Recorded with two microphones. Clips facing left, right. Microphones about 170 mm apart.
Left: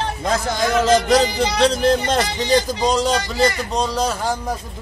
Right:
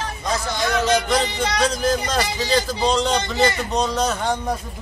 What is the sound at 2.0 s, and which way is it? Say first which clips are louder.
Speech: left 3 dB; 20° left (ahead or behind).